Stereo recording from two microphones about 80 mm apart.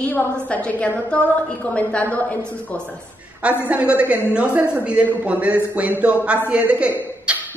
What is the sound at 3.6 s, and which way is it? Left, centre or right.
A man's voice, centre.